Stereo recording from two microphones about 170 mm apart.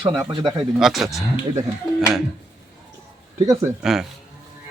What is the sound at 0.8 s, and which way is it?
Speech, centre (ahead or behind).